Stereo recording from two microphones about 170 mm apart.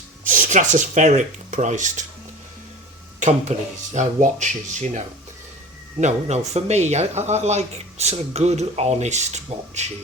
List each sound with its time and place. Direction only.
0.3 s speech: 50° right (ahead or behind)
3.5 s speech: 45° right (ahead or behind)